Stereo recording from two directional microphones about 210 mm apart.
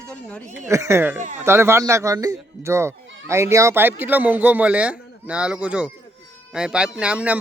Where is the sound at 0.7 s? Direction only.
15° right (ahead or behind).